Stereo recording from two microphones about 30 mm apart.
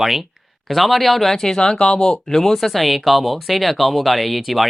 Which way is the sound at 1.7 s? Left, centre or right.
Left.